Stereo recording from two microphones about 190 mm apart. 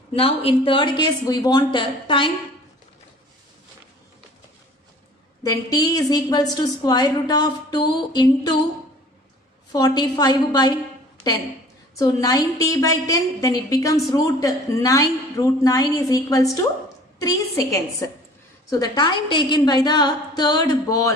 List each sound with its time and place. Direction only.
0.1 s a woman's voice: 30° left (ahead or behind)
5.4 s a woman's voice: 20° left (ahead or behind)
9.7 s a woman's voice: 20° left (ahead or behind)
11.9 s a woman's voice: 20° left (ahead or behind)